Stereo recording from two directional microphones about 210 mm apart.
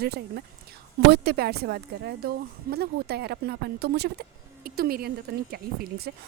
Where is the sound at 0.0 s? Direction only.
50° right (ahead or behind).